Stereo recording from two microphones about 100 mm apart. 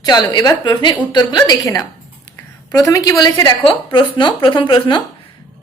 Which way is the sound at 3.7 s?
55° left (ahead or behind).